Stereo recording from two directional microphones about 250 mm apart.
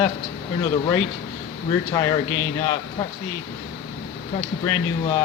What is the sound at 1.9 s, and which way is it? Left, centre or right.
Speech, centre.